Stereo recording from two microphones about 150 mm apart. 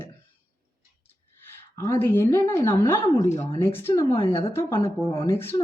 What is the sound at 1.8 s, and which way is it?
A woman's voice, 15° left (ahead or behind).